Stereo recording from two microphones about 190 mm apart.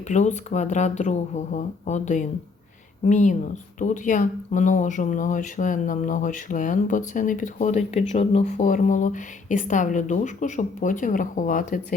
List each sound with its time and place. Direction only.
0.1 s speech: 40° left (ahead or behind)